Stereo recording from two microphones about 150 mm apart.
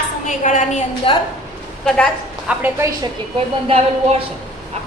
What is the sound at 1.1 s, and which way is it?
Speech, 35° left (ahead or behind).